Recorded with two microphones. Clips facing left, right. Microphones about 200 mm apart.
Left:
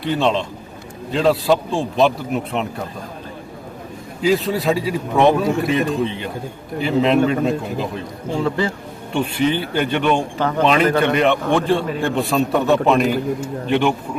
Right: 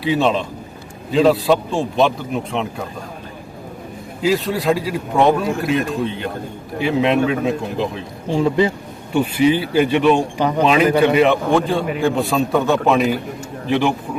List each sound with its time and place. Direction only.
0.0 s a man's voice: 5° right (ahead or behind)
4.2 s a man's voice: centre (ahead or behind)
8.4 s speech: 20° right (ahead or behind)
9.1 s a man's voice: 5° right (ahead or behind)